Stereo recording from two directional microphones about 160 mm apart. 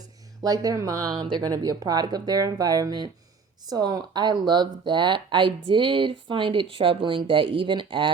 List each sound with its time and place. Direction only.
0.4 s speech: 25° right (ahead or behind)